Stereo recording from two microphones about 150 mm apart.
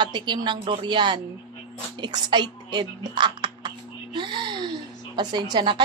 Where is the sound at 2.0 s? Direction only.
30° right (ahead or behind).